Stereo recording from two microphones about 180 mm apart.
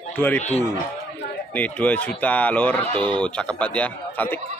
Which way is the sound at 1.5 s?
10° left (ahead or behind).